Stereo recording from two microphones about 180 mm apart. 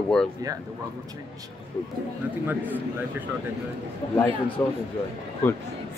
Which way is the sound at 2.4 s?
10° right (ahead or behind).